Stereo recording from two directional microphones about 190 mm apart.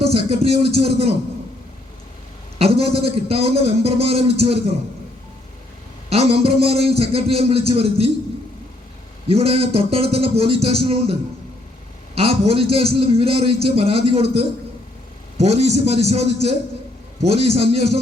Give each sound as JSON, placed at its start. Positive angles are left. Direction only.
{"t": 0.0, "sound": "a man's voice", "side_deg": -30}
{"t": 2.6, "sound": "a man's voice", "side_deg": -30}
{"t": 6.1, "sound": "a man's voice", "side_deg": -30}
{"t": 9.2, "sound": "a man's voice", "side_deg": -30}
{"t": 12.1, "sound": "a man's voice", "side_deg": -30}